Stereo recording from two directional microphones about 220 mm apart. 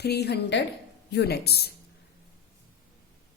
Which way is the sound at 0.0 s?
50° left (ahead or behind).